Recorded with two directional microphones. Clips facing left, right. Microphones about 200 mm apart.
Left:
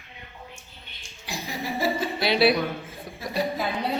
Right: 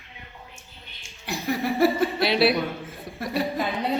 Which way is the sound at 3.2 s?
60° right (ahead or behind).